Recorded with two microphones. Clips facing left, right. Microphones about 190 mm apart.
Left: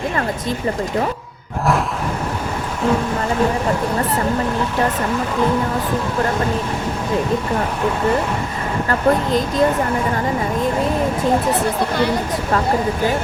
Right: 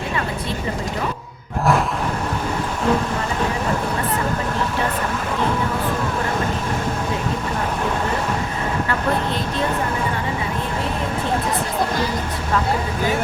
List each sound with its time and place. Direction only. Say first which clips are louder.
8.9 s speech: left 8 dB; 40° left (ahead or behind)